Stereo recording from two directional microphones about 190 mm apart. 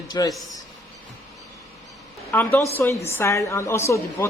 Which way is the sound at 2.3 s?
10° left (ahead or behind).